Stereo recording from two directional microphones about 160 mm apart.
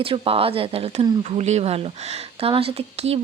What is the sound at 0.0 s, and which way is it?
Speech, 35° right (ahead or behind).